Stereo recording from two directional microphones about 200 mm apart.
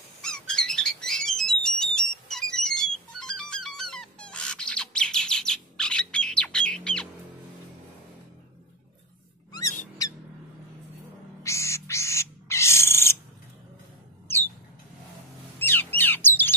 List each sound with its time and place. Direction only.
0.2 s alarm: 5° left (ahead or behind)
9.5 s music: 15° left (ahead or behind)
11.4 s bird: 15° left (ahead or behind)
14.2 s a sound: 10° left (ahead or behind)
15.6 s bird: 10° left (ahead or behind)